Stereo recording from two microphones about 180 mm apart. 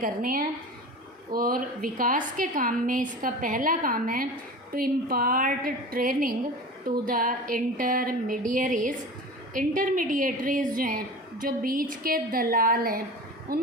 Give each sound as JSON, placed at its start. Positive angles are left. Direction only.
{"t": 0.0, "sound": "a woman's voice", "side_deg": -50}